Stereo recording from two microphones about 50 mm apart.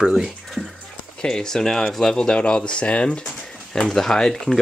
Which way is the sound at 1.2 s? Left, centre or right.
Centre.